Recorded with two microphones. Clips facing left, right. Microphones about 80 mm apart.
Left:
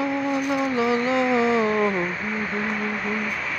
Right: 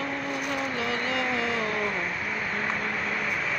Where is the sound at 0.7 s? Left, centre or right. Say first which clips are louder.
Left 8 dB; centre.